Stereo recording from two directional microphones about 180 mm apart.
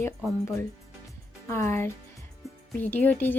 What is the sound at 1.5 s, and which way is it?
Speech, 15° left (ahead or behind).